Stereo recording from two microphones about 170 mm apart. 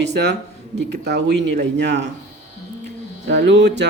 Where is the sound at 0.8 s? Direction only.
80° right.